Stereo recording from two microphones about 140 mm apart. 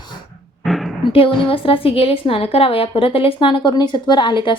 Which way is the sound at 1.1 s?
40° left (ahead or behind).